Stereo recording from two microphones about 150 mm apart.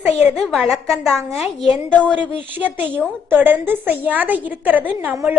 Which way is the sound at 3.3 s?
10° right (ahead or behind).